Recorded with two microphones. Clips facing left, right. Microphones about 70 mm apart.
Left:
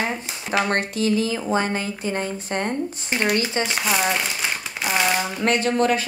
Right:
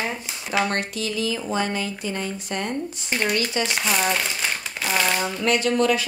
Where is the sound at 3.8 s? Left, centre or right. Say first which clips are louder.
Left 1 dB; centre.